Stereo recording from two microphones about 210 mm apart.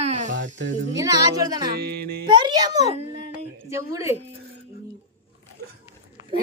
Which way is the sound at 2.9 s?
30° right (ahead or behind).